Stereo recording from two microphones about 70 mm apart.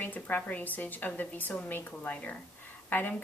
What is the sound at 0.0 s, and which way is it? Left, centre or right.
A woman's voice, left.